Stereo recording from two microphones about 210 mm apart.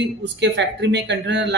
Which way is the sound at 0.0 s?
55° right (ahead or behind).